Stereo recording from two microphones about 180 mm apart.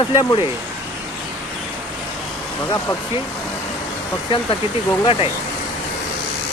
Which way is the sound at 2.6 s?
20° left (ahead or behind).